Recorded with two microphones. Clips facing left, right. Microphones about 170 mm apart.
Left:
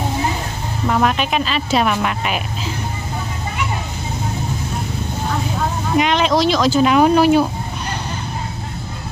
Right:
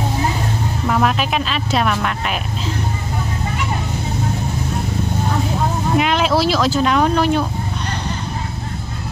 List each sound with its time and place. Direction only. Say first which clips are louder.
0.8 s speech: left 1 dB; centre (ahead or behind)
5.9 s speech: left 2 dB; 5° right (ahead or behind)